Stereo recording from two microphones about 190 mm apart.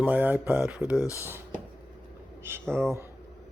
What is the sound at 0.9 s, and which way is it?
Speech, 15° left (ahead or behind).